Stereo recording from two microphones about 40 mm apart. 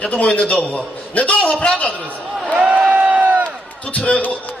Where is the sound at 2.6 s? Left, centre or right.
Right.